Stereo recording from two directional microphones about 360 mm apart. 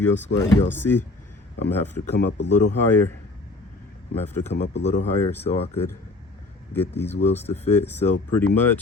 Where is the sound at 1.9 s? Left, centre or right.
Left.